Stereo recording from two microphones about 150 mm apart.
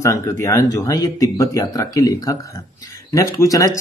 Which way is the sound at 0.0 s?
20° left (ahead or behind).